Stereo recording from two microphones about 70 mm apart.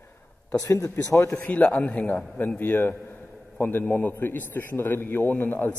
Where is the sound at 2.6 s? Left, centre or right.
Left.